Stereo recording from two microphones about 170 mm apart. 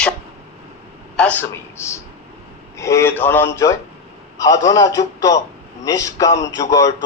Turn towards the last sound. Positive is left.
turn(degrees=20)  # may be behind; listen again after turning